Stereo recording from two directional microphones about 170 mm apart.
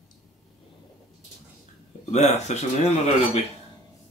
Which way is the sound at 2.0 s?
40° left (ahead or behind).